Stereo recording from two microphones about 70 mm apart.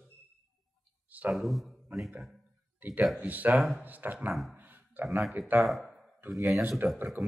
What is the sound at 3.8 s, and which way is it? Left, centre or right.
Speech, right.